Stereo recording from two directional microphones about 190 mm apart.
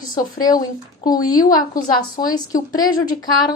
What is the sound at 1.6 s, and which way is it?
Speech, 45° left (ahead or behind).